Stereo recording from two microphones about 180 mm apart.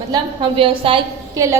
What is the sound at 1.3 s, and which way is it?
Speech, 15° right (ahead or behind).